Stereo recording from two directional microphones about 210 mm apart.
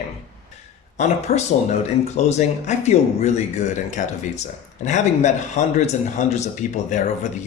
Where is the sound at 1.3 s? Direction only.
45° left (ahead or behind).